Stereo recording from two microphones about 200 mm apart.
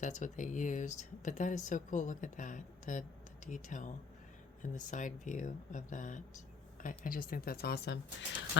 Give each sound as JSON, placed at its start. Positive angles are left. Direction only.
{"t": 0.0, "sound": "speech", "side_deg": 40}